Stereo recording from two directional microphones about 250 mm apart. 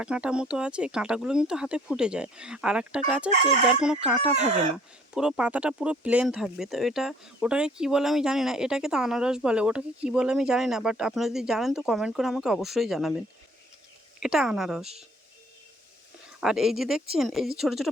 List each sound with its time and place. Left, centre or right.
0.0 s speech: centre
3.3 s chicken: right
5.1 s speech: centre
16.4 s speech: centre